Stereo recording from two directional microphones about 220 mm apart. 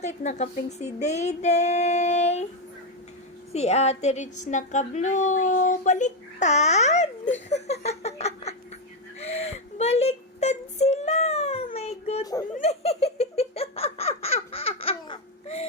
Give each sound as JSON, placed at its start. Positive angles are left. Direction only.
{"t": 0.0, "sound": "speech", "side_deg": 30}
{"t": 3.5, "sound": "speech", "side_deg": 30}
{"t": 9.2, "sound": "whimper", "side_deg": 30}
{"t": 12.2, "sound": "speech", "side_deg": 15}
{"t": 12.5, "sound": "laughter", "side_deg": 30}